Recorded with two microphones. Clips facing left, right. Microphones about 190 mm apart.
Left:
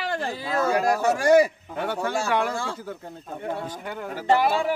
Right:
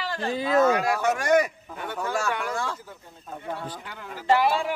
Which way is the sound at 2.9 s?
70° left (ahead or behind).